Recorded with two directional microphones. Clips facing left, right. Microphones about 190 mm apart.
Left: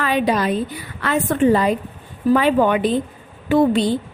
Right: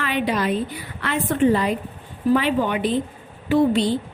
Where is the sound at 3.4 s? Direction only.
50° left (ahead or behind).